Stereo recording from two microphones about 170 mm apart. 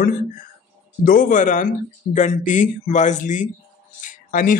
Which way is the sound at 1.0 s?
55° left (ahead or behind).